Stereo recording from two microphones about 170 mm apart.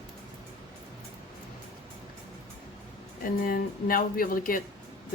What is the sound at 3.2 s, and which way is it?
Speech, 60° left (ahead or behind).